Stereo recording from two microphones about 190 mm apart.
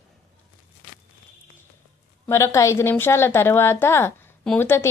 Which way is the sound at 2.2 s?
15° left (ahead or behind).